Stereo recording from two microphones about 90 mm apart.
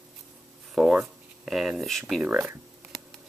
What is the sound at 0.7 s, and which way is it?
Speech, 5° right (ahead or behind).